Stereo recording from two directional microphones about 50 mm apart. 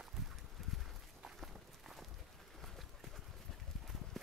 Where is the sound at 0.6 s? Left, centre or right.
Centre.